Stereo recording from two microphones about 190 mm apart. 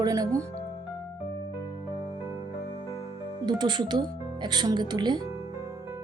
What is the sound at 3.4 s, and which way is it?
Speech, 25° right (ahead or behind).